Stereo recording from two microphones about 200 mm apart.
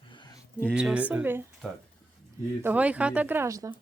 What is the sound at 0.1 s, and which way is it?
Music, 20° left (ahead or behind).